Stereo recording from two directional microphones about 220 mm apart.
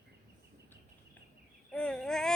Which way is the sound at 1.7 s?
5° left (ahead or behind).